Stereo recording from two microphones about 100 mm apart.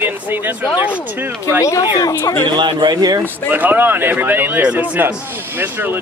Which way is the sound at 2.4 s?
50° right (ahead or behind).